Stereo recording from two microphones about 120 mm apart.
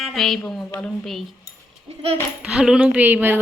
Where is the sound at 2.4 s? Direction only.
5° right (ahead or behind).